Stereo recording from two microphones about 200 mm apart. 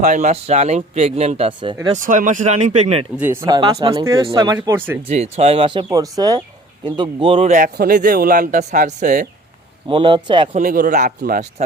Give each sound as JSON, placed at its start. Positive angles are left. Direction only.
{"t": 0.0, "sound": "a man's voice", "side_deg": -40}
{"t": 2.0, "sound": "a man's voice", "side_deg": -40}
{"t": 3.4, "sound": "speech", "side_deg": -20}
{"t": 5.0, "sound": "a man's voice", "side_deg": -30}
{"t": 9.9, "sound": "speech", "side_deg": -25}
{"t": 10.5, "sound": "a man's voice", "side_deg": -45}